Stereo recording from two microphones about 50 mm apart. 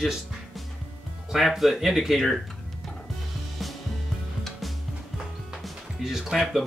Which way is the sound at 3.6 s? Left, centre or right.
Centre.